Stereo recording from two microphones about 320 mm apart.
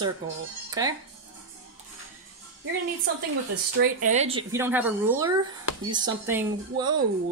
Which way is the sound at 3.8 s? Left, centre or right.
Right.